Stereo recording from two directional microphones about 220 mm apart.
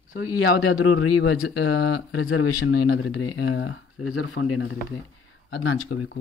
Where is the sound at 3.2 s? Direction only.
65° left (ahead or behind).